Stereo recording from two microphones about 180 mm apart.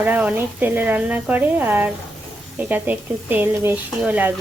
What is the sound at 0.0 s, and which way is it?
Speech, 10° right (ahead or behind).